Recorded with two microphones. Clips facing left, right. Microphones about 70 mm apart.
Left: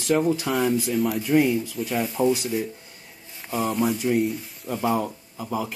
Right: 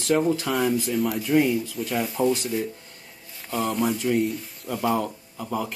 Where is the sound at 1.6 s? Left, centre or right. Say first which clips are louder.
Left 1 dB; centre.